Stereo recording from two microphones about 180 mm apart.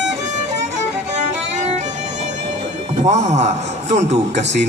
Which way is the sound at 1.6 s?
40° right (ahead or behind).